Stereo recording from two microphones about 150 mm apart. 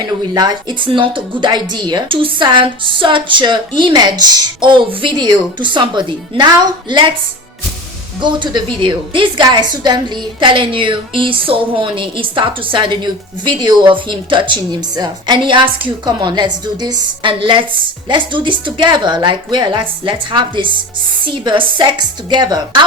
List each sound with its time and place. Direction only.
0.3 s a woman's voice: 30° right (ahead or behind)
8.2 s a woman's voice: 30° right (ahead or behind)